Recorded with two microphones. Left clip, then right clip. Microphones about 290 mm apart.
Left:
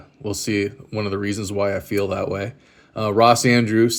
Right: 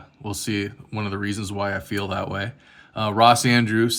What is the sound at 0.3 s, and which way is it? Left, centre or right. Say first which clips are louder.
Speech: left 5 dB; centre.